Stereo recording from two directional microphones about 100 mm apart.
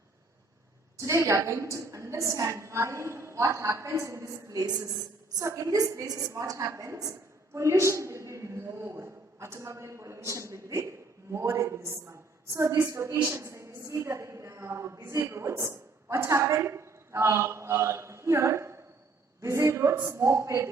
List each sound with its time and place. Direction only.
0.9 s a woman's voice: 30° right (ahead or behind)
13.3 s a sound: 25° right (ahead or behind)
15.0 s a woman's voice: 25° right (ahead or behind)